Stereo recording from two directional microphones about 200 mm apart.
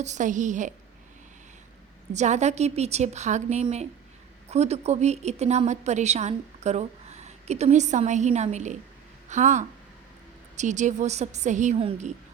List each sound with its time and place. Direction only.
0.0 s a woman's voice: 35° right (ahead or behind)
2.1 s a woman's voice: 35° right (ahead or behind)